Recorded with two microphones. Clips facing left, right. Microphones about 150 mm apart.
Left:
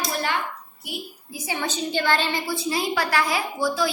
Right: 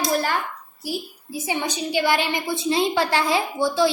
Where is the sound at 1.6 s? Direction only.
10° right (ahead or behind).